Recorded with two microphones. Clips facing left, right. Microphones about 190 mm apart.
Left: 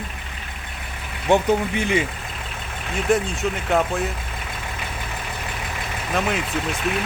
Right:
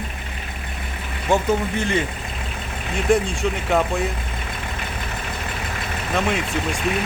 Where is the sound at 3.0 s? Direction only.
Centre (ahead or behind).